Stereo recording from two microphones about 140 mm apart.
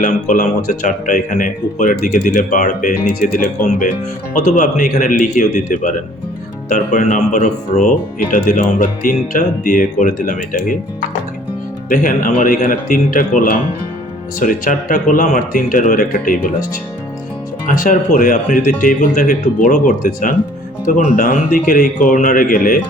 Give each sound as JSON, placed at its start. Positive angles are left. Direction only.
{"t": 0.0, "sound": "speech", "side_deg": 65}
{"t": 11.9, "sound": "a man's voice", "side_deg": 75}
{"t": 14.3, "sound": "speech", "side_deg": 70}
{"t": 17.7, "sound": "speech", "side_deg": 80}
{"t": 21.2, "sound": "a man's voice", "side_deg": 85}